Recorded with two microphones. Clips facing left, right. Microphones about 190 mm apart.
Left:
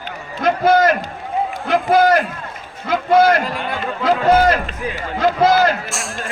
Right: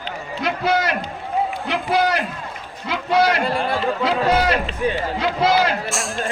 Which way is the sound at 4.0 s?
50° left (ahead or behind).